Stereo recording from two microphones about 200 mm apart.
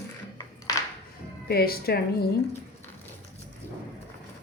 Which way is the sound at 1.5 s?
50° left (ahead or behind).